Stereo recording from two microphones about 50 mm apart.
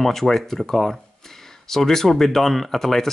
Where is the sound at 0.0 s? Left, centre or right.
Centre.